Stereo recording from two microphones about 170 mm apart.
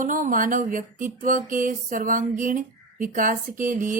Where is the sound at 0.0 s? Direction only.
50° right (ahead or behind).